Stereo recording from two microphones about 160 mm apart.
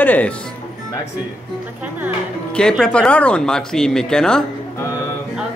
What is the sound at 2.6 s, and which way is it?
A man's voice, 5° left (ahead or behind).